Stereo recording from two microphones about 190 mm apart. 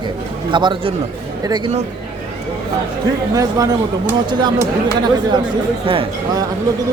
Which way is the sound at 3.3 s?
20° right (ahead or behind).